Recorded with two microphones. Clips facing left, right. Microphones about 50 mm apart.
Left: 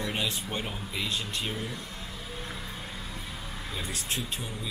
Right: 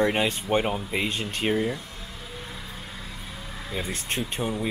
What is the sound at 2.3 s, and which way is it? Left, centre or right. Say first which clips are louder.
Vehicle: even; centre.